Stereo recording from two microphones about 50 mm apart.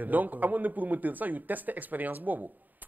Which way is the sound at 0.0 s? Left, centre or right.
Right.